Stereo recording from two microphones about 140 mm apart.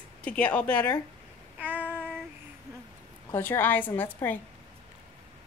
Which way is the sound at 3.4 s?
15° left (ahead or behind).